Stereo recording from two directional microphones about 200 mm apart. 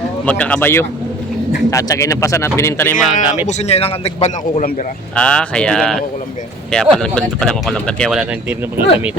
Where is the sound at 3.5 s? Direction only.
35° left (ahead or behind).